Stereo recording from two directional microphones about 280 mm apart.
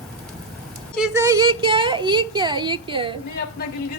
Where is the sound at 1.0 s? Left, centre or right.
Centre.